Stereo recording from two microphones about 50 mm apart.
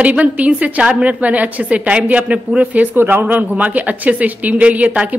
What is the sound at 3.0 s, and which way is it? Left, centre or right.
Speech, right.